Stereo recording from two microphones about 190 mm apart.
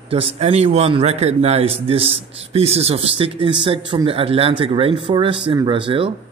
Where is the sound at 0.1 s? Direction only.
30° right (ahead or behind).